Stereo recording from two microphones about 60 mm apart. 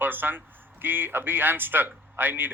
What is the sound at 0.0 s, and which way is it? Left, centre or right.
Speech, right.